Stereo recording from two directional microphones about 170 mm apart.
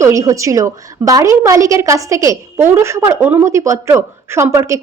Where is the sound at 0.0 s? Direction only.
20° right (ahead or behind).